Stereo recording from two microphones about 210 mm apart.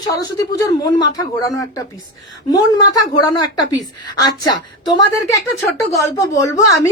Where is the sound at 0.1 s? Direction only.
15° left (ahead or behind).